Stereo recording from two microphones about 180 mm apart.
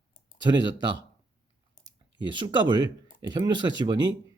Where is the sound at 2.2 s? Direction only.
25° right (ahead or behind).